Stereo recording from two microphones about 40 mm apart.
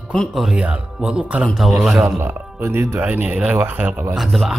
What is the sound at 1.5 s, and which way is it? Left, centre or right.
Speech, centre.